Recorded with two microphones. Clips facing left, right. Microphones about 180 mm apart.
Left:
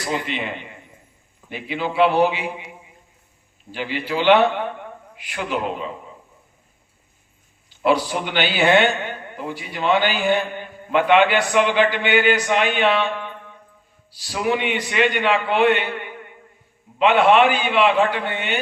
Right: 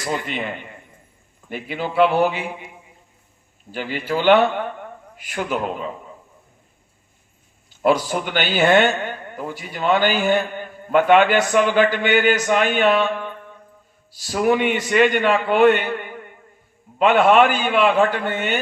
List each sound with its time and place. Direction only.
0.1 s a man's voice: 45° right (ahead or behind)
3.7 s a man's voice: 45° right (ahead or behind)
7.7 s a man's voice: 45° right (ahead or behind)